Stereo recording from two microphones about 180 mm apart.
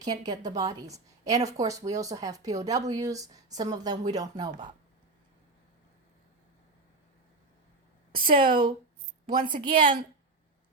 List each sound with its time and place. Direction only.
0.3 s speech: 20° right (ahead or behind)
8.1 s a woman's voice: 50° right (ahead or behind)